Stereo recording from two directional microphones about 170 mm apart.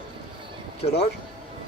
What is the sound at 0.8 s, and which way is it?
Speech, 35° left (ahead or behind).